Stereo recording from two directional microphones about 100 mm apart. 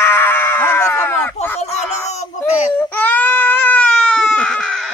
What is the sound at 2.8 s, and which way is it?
Baby cry, 15° left (ahead or behind).